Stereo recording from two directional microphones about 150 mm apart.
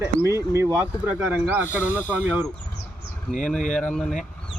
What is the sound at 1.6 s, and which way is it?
Speech, 15° left (ahead or behind).